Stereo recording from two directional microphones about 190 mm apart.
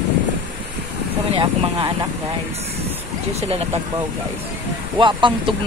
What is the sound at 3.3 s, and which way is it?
Speech, 30° right (ahead or behind).